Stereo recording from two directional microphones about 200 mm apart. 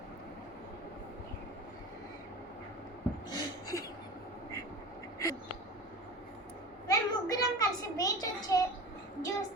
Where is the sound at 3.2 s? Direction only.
20° left (ahead or behind).